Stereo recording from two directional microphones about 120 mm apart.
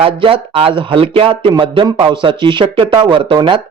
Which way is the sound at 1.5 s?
35° right (ahead or behind).